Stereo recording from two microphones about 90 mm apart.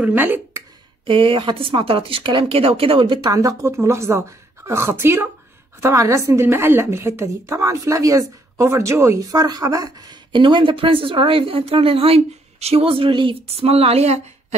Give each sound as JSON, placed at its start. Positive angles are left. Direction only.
{"t": 0.0, "sound": "speech", "side_deg": -20}
{"t": 1.0, "sound": "speech", "side_deg": -75}
{"t": 3.2, "sound": "a woman's voice", "side_deg": -40}
{"t": 9.3, "sound": "speech", "side_deg": -45}